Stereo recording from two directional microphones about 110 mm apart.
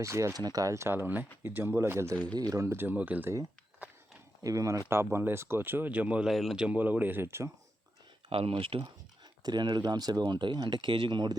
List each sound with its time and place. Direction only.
0.0 s speech: 25° right (ahead or behind)
2.2 s speech: 35° right (ahead or behind); by 3.3 s 15° right (ahead or behind)
4.4 s speech: 30° right (ahead or behind)
8.3 s speech: 60° right (ahead or behind)
9.4 s speech: 40° right (ahead or behind)